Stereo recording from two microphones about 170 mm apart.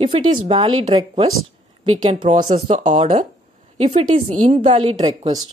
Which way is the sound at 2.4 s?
40° right (ahead or behind).